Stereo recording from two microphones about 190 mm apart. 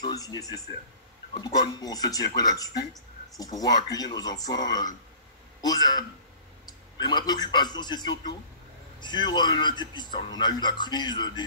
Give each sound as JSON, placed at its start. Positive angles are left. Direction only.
{"t": 0.0, "sound": "a man's voice", "side_deg": 20}